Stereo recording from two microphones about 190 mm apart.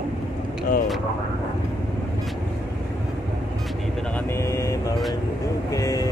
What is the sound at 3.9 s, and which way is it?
Speech, 5° left (ahead or behind).